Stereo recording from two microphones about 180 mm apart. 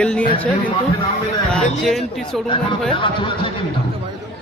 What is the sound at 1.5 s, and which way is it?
Speech, centre (ahead or behind).